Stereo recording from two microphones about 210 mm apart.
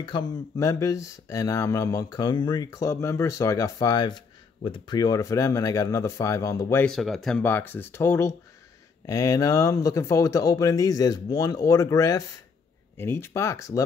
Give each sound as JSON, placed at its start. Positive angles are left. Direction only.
{"t": 0.0, "sound": "speech", "side_deg": 20}
{"t": 6.9, "sound": "speech", "side_deg": 0}